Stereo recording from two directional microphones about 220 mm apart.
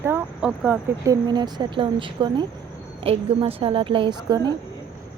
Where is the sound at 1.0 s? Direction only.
15° right (ahead or behind).